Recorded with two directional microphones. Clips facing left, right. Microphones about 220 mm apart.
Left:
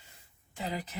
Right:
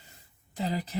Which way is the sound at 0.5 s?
35° right (ahead or behind).